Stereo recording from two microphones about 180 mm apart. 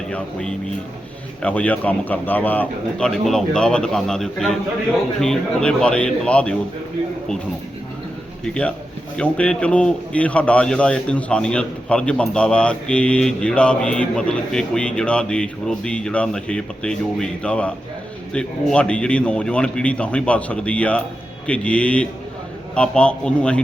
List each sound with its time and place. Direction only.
0.1 s a man's voice: 5° left (ahead or behind)
9.1 s a man's voice: 5° left (ahead or behind)